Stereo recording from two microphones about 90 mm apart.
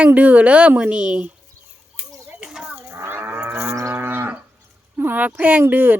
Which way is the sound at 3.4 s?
30° right (ahead or behind).